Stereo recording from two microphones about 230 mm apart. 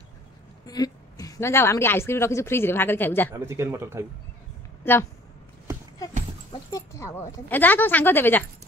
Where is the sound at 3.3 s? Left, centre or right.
Centre.